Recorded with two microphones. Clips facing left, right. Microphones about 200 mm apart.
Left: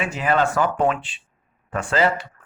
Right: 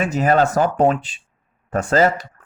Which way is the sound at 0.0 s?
40° right (ahead or behind).